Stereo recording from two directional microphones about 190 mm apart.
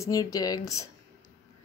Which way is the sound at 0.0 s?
20° left (ahead or behind).